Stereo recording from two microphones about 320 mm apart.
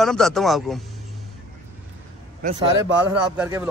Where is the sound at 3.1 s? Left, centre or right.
Centre.